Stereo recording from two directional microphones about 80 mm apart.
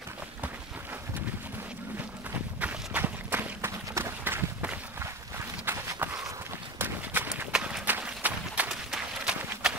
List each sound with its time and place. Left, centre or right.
2.6 s run: right
5.7 s walk: right
6.8 s a sound: right
7.5 s run: centre